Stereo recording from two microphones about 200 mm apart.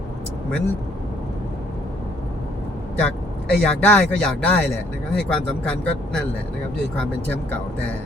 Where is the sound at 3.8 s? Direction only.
5° left (ahead or behind).